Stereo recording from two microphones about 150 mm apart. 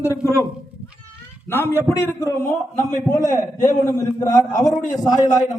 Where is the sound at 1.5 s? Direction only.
15° left (ahead or behind).